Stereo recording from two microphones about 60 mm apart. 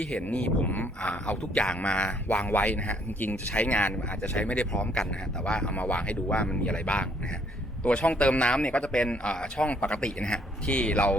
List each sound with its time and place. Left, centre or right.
0.0 s a man's voice: centre